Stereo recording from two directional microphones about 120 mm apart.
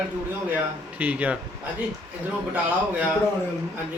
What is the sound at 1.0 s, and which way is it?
Speech, 10° right (ahead or behind).